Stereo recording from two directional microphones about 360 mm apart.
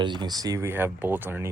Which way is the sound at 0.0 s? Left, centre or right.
Centre.